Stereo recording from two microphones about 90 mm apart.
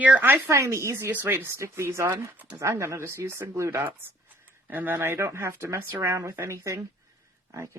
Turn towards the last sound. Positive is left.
turn(degrees=-35)  # may be behind; listen again after turning